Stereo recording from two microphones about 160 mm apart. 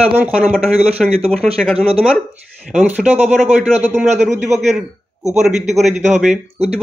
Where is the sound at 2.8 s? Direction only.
10° right (ahead or behind).